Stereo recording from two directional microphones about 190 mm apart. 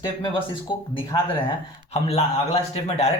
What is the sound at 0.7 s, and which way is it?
Speech, 25° left (ahead or behind).